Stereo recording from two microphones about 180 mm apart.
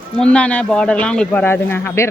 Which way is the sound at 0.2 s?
5° left (ahead or behind).